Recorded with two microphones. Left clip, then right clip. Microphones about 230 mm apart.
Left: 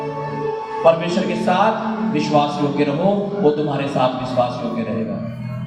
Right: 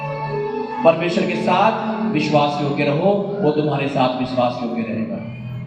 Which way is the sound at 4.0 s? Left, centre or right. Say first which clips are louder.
Even; left.